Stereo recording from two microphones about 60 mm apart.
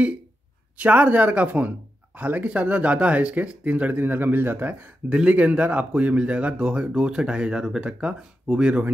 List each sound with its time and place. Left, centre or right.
0.7 s speech: right
5.1 s speech: centre